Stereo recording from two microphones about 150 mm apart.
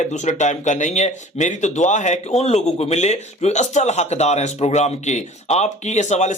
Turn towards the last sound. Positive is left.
turn(degrees=50)  # may be behind; listen again after turning